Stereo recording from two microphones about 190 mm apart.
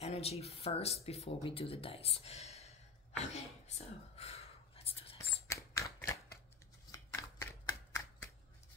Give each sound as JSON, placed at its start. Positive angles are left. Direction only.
{"t": 0.0, "sound": "speech", "side_deg": 35}
{"t": 5.5, "sound": "a sound", "side_deg": 15}
{"t": 6.9, "sound": "shuffling cards", "side_deg": 15}